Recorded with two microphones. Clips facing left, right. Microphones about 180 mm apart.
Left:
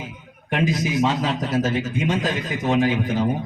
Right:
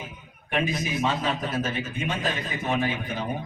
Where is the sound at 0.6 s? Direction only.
90° left.